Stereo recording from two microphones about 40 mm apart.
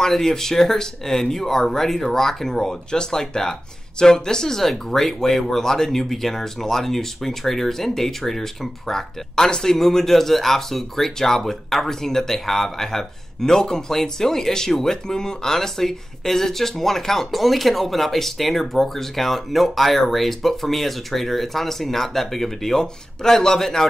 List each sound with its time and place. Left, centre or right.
0.0 s speech: centre